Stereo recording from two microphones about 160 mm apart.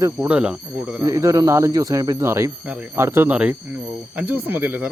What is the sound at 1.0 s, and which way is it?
Speech, 20° right (ahead or behind).